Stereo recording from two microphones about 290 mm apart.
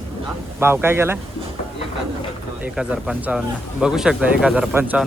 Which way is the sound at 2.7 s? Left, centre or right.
Centre.